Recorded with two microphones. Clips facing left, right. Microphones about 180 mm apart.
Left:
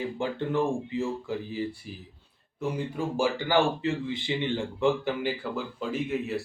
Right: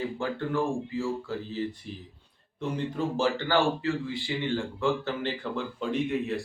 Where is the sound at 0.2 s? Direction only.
20° left (ahead or behind).